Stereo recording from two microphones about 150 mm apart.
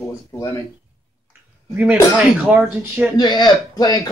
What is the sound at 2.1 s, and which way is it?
Speech, 10° right (ahead or behind).